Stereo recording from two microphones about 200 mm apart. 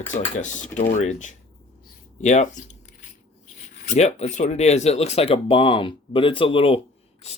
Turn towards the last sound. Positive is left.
turn(degrees=25)  # may be behind; listen again after turning